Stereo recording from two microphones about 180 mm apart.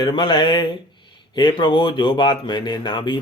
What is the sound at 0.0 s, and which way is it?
Speech, 25° left (ahead or behind).